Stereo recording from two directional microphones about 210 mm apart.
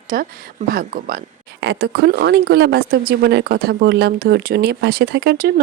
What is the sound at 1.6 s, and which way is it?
Speech, 55° right (ahead or behind).